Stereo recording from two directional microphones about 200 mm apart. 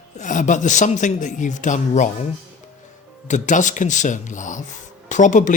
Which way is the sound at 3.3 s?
35° left (ahead or behind).